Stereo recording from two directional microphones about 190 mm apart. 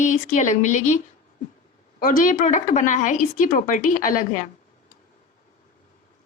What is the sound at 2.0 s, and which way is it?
A woman's voice, 45° left (ahead or behind).